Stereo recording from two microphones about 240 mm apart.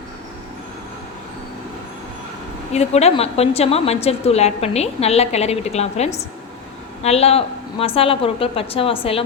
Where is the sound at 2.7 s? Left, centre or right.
Left.